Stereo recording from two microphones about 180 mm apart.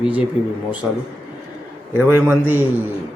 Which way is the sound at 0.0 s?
5° right (ahead or behind).